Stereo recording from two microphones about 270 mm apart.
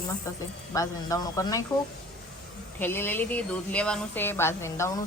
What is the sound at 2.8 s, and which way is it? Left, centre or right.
Speech, centre.